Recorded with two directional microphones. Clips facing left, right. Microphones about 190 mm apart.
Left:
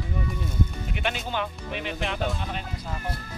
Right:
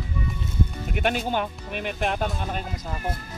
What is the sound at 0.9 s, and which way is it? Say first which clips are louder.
Speech: right 5 dB; 50° right (ahead or behind).